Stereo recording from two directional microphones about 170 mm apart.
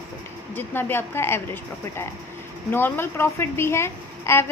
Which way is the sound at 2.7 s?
10° left (ahead or behind).